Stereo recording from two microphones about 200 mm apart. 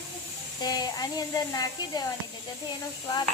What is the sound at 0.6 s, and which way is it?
Speech, 20° left (ahead or behind).